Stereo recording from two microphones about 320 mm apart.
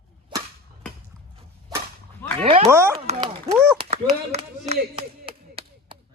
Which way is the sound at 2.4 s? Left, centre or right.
Centre.